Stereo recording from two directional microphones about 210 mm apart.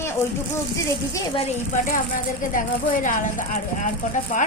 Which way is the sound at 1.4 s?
35° left (ahead or behind).